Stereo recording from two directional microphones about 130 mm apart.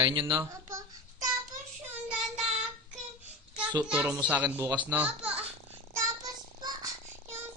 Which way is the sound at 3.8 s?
5° right (ahead or behind).